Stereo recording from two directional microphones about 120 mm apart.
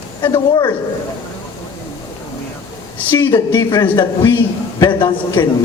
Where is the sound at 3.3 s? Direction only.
40° left (ahead or behind).